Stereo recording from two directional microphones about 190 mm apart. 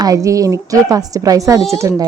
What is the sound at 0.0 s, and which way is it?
Speech, 20° right (ahead or behind).